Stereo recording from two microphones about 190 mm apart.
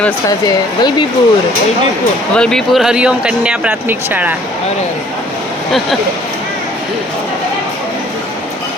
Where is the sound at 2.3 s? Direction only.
5° left (ahead or behind).